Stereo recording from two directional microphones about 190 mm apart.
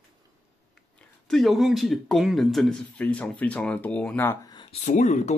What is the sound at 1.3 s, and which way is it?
Speech, centre (ahead or behind).